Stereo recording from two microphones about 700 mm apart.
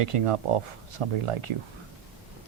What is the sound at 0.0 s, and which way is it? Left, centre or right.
Speech, right.